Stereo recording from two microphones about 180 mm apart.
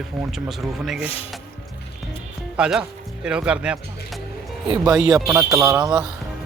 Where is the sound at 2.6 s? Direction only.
5° right (ahead or behind).